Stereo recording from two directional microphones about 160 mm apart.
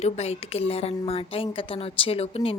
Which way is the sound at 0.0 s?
40° left (ahead or behind).